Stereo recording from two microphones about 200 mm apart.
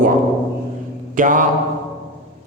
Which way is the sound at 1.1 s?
40° right (ahead or behind).